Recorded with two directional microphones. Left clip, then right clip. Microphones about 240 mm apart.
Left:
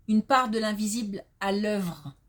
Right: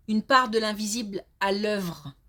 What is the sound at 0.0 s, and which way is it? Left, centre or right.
Speech, right.